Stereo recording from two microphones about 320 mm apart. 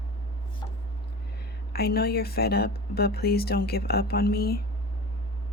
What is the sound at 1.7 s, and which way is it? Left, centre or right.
Speech, left.